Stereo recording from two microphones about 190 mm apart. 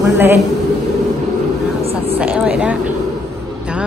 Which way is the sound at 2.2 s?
5° right (ahead or behind).